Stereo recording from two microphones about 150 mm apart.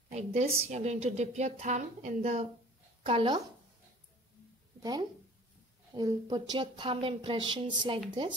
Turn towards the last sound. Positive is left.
turn(degrees=-35)  # may be behind; listen again after turning